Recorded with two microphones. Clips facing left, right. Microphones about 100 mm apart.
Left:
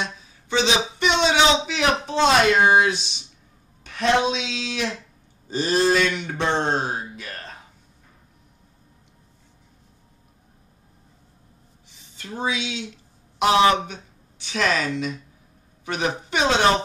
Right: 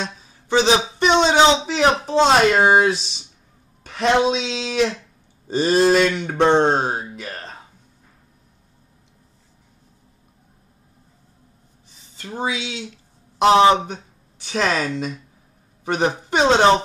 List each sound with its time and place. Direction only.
0.0 s a sound: 35° right (ahead or behind)
3.8 s speech: 35° right (ahead or behind)
12.2 s speech: 30° right (ahead or behind)